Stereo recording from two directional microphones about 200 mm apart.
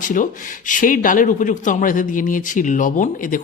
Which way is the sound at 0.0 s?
40° left (ahead or behind).